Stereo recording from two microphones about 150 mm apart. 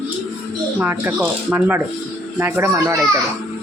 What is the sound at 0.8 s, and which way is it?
Speech, 10° right (ahead or behind).